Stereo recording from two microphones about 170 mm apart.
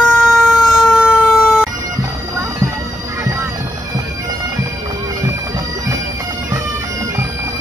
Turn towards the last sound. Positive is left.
turn(degrees=-20)  # may be behind; listen again after turning